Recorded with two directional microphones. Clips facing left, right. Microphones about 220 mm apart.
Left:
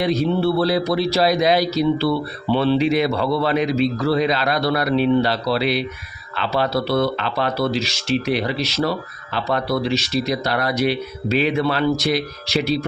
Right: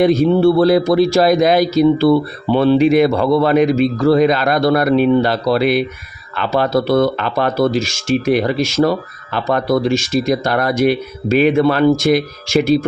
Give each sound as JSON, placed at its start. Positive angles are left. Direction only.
{"t": 0.0, "sound": "speech", "side_deg": -50}